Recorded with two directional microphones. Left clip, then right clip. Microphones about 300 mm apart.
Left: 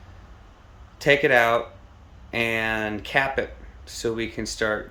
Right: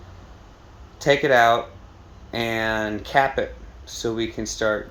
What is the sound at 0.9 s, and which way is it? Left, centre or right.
Speech, centre.